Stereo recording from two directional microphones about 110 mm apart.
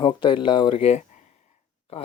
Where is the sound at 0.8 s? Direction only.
75° left (ahead or behind).